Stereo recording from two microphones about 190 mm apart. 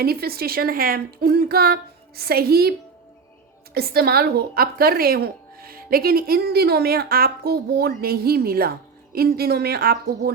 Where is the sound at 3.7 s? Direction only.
55° right (ahead or behind).